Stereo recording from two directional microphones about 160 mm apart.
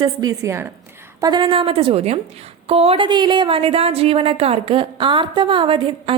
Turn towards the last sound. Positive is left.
turn(degrees=-35)  # may be behind; listen again after turning